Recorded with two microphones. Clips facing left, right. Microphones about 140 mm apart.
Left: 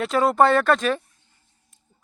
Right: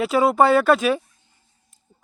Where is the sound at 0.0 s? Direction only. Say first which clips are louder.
Right 1 dB; 5° right (ahead or behind).